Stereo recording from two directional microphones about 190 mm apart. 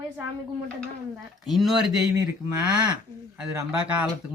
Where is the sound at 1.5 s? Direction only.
Centre (ahead or behind).